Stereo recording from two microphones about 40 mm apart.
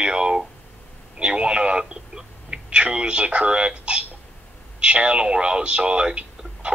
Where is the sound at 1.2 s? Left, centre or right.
Right.